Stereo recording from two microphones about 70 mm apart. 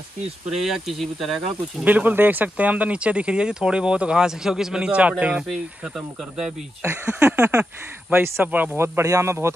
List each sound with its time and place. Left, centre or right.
0.5 s speech: centre
1.9 s speech: right
5.5 s speech: centre
7.2 s a sound: right